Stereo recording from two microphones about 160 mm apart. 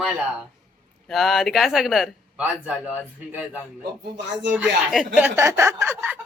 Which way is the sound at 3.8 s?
90° right.